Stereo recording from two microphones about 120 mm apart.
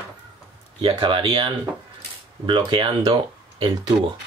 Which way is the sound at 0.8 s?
45° right (ahead or behind).